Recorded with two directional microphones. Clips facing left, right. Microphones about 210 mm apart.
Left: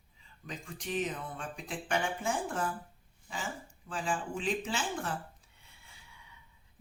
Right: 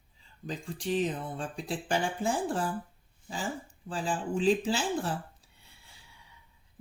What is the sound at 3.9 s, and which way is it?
Speech, 35° right (ahead or behind).